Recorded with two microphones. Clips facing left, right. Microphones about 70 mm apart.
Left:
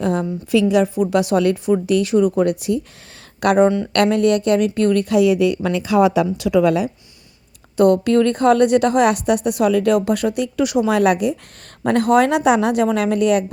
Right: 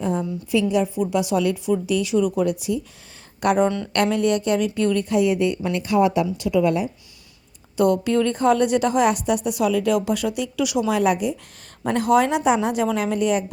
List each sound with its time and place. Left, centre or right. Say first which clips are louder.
0.0 s a woman's voice: left 4 dB; left
3.9 s a woman's voice: left 4 dB; left
5.0 s a woman's voice: left 5 dB; left
7.8 s a woman's voice: left 5 dB; left
10.9 s a woman's voice: left 4 dB; left